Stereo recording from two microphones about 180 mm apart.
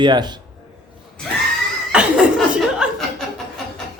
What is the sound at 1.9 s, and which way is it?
Chuckle, 5° right (ahead or behind).